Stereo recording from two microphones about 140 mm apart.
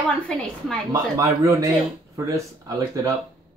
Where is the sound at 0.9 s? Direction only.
20° right (ahead or behind).